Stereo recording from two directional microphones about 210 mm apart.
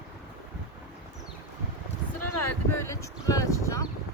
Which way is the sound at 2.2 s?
90° left.